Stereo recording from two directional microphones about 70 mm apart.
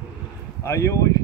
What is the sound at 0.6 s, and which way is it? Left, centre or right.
Speech, left.